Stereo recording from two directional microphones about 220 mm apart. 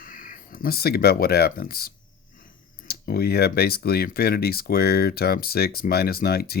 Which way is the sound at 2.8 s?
45° left (ahead or behind).